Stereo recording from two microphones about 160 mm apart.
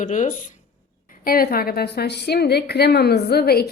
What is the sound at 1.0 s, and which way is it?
A woman's voice, 65° left (ahead or behind).